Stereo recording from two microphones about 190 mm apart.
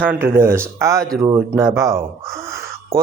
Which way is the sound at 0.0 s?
10° right (ahead or behind).